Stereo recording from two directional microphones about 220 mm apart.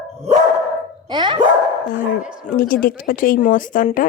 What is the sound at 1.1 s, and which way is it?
Speech, 20° right (ahead or behind).